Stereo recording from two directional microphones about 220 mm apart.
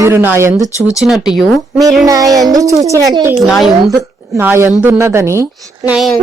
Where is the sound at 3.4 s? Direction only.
Centre (ahead or behind).